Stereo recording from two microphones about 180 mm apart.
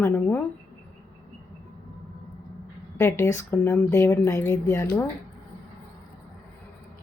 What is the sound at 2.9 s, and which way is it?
Speech, 15° left (ahead or behind).